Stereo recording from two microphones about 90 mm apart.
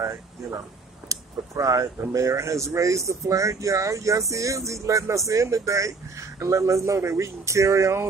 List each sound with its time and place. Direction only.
1.0 s speech: 35° right (ahead or behind)